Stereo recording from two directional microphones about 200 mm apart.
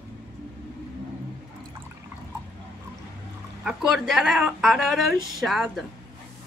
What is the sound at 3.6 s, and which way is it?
Speech, centre (ahead or behind).